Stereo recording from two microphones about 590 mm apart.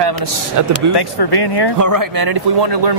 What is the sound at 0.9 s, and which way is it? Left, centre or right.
Speech, left.